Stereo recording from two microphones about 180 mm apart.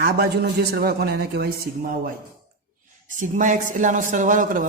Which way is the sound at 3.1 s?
45° right (ahead or behind).